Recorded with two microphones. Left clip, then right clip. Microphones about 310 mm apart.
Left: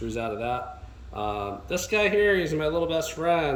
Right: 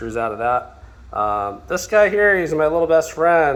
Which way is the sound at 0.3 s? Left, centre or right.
Centre.